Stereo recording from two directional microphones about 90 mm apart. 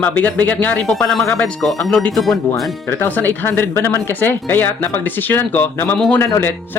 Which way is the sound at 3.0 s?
25° left (ahead or behind).